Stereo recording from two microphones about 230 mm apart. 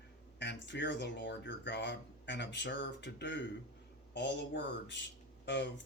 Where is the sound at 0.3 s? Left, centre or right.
Left.